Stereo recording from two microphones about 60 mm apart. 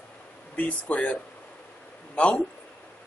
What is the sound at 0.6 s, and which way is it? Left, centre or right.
Speech, left.